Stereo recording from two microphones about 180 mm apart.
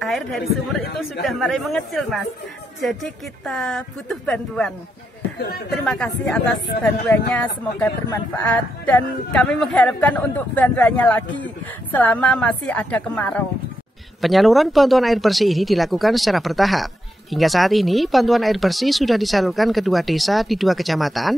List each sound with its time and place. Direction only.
0.0 s speech: centre (ahead or behind)
5.9 s speech: 5° left (ahead or behind)